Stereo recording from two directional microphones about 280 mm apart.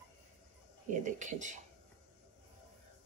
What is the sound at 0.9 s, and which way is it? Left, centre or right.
Speech, right.